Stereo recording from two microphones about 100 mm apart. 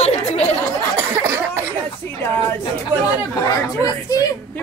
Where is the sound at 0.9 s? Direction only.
25° right (ahead or behind).